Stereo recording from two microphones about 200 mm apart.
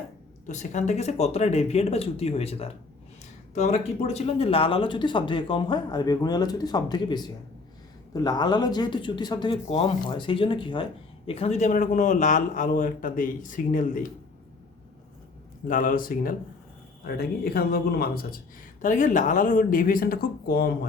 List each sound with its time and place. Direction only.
0.4 s a man's voice: 35° left (ahead or behind)
15.6 s speech: 45° left (ahead or behind)
18.8 s speech: 40° left (ahead or behind)